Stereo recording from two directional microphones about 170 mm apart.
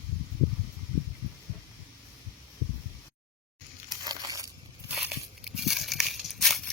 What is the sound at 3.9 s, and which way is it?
Crushing, 25° right (ahead or behind).